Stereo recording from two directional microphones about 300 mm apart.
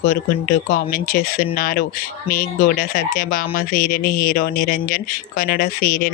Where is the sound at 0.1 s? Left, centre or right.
Left.